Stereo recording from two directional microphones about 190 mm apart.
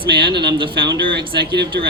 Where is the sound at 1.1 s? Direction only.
60° right (ahead or behind).